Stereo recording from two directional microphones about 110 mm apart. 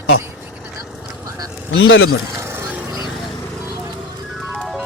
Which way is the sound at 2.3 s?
25° right (ahead or behind).